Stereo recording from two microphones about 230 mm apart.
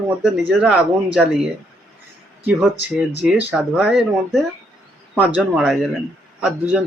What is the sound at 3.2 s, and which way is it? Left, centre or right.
Speech, centre.